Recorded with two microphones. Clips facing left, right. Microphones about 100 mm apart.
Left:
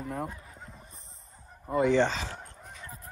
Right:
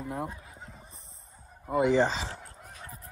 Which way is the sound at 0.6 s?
5° right (ahead or behind).